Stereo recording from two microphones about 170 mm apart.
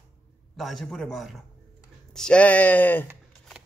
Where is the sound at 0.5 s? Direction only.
Centre (ahead or behind).